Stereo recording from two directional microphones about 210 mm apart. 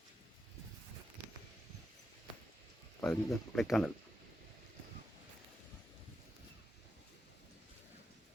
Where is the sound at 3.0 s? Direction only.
Centre (ahead or behind).